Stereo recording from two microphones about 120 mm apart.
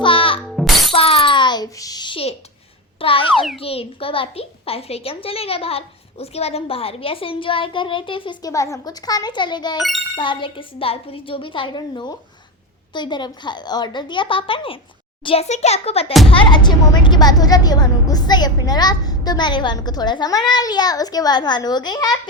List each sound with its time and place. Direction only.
0.0 s music: 45° left (ahead or behind)
0.3 s music: centre (ahead or behind)
0.9 s a sound: 50° left (ahead or behind); by 2.1 s 35° left (ahead or behind)
3.0 s a child's voice: 50° left (ahead or behind)
8.4 s a woman's voice: 30° left (ahead or behind); by 15.4 s 50° left (ahead or behind)
15.4 s a child's voice: 65° left (ahead or behind)
16.3 s a woman's voice: 40° left (ahead or behind)